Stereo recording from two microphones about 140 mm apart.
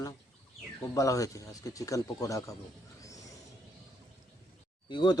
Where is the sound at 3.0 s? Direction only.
25° left (ahead or behind).